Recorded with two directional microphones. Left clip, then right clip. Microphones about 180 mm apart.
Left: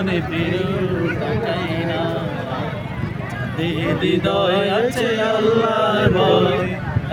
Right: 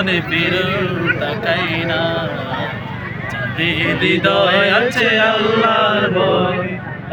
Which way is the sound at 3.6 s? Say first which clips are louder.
Right 5 dB; 25° left (ahead or behind).